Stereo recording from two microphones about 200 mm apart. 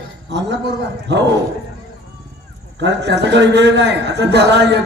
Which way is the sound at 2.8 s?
60° right (ahead or behind).